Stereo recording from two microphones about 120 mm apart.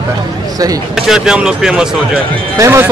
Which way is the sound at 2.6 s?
20° right (ahead or behind).